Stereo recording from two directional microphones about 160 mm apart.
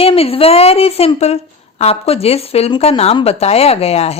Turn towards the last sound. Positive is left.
turn(degrees=40)  # may be behind; listen again after turning